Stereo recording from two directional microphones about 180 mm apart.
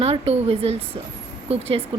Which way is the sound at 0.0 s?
35° right (ahead or behind).